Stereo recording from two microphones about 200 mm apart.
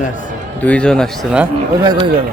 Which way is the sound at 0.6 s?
5° left (ahead or behind).